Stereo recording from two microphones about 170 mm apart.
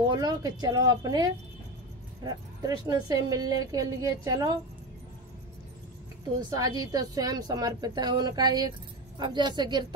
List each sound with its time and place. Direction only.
0.1 s speech: 25° right (ahead or behind)
6.5 s speech: 20° right (ahead or behind)